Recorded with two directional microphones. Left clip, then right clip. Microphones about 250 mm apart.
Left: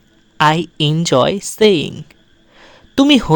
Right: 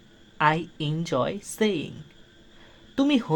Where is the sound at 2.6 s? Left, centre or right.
Left.